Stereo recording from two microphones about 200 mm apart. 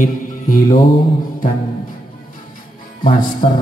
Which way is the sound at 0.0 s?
40° left (ahead or behind).